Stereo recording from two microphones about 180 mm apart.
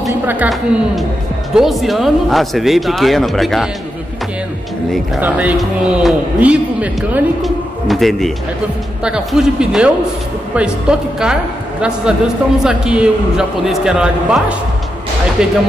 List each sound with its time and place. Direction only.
0.3 s a man's voice: 5° right (ahead or behind)
5.2 s a man's voice: 10° right (ahead or behind)